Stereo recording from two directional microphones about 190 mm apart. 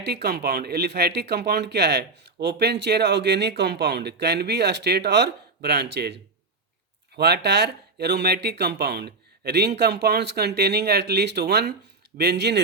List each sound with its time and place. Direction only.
0.0 s speech: 60° right (ahead or behind)
7.2 s speech: 60° right (ahead or behind)